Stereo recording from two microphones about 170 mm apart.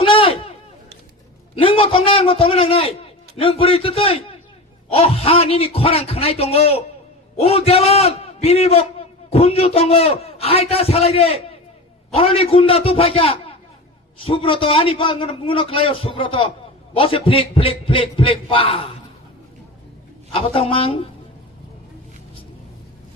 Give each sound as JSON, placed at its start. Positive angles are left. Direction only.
{"t": 0.0, "sound": "a sound", "side_deg": 30}
{"t": 1.5, "sound": "a man's voice", "side_deg": 30}
{"t": 20.3, "sound": "a man's voice", "side_deg": 30}